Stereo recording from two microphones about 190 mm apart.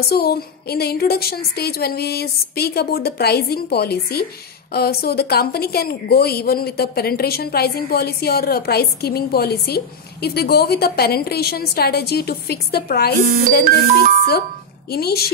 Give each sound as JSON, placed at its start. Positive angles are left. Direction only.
{"t": 0.1, "sound": "a woman's voice", "side_deg": 55}
{"t": 14.9, "sound": "a woman's voice", "side_deg": 55}